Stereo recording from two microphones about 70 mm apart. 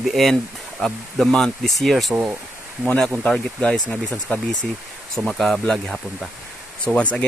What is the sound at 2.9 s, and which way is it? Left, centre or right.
Speech, centre.